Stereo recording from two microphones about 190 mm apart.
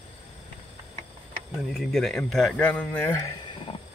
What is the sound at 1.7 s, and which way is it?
Speech, centre (ahead or behind).